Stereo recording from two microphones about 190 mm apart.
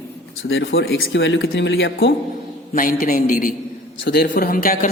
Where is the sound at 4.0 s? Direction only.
55° left (ahead or behind).